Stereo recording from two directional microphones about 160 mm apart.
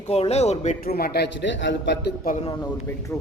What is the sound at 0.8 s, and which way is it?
A man's voice, 70° left (ahead or behind).